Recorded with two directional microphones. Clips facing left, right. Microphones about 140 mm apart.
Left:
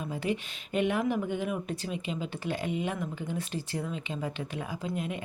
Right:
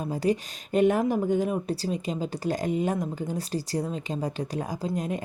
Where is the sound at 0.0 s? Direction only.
40° right (ahead or behind).